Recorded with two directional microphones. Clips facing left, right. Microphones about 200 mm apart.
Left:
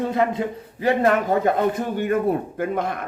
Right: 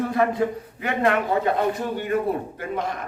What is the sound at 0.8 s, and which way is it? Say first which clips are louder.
A man's voice: left 3 dB; 45° left (ahead or behind).